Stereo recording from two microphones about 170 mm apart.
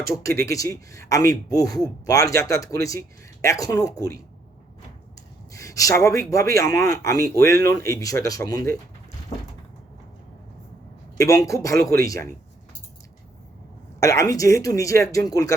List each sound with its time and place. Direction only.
0.4 s speech: 20° left (ahead or behind)
5.5 s speech: 20° left (ahead or behind)
11.2 s speech: 20° left (ahead or behind)
14.0 s speech: 20° left (ahead or behind)